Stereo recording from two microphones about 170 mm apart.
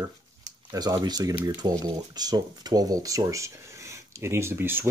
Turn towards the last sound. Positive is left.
turn(degrees=-15)  # may be behind; listen again after turning